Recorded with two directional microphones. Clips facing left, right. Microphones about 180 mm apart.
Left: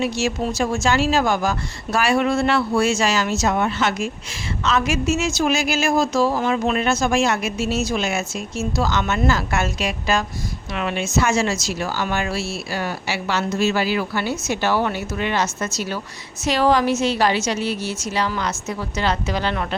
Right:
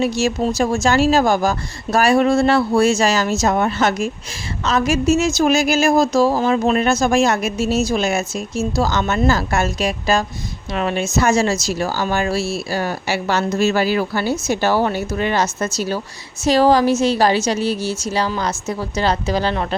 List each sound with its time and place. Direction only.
0.0 s a woman's voice: 40° right (ahead or behind)